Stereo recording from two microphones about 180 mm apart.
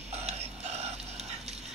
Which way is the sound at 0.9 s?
35° right (ahead or behind).